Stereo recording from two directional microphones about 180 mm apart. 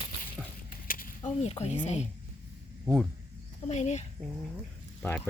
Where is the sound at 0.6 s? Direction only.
50° left (ahead or behind).